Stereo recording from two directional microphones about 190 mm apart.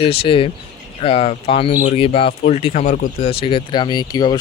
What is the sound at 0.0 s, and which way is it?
Speech, 30° left (ahead or behind).